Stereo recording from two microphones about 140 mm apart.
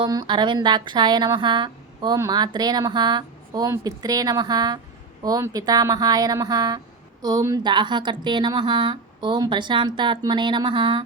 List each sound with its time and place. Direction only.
0.0 s speech: 30° right (ahead or behind)